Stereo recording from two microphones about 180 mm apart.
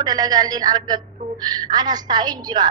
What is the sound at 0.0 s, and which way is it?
A woman's voice, 20° right (ahead or behind).